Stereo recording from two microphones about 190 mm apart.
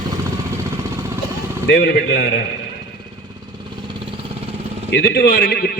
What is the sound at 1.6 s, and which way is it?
Speech, 65° left (ahead or behind).